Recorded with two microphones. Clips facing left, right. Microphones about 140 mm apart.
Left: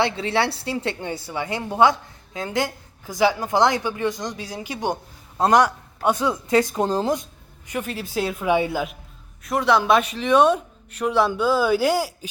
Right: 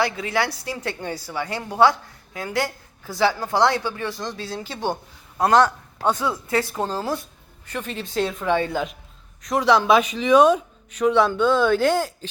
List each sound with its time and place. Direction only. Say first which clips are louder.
0.0 s a woman's voice: left 1 dB; 30° left (ahead or behind); by 12.3 s 10° left (ahead or behind)